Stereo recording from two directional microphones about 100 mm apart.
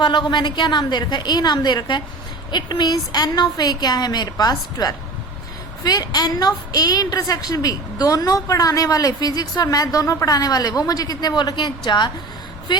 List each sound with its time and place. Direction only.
0.0 s a woman's voice: 50° left (ahead or behind)